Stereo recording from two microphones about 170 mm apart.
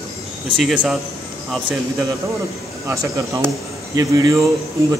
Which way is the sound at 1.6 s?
20° right (ahead or behind).